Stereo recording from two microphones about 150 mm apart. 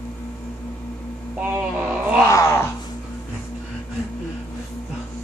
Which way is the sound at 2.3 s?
20° left (ahead or behind).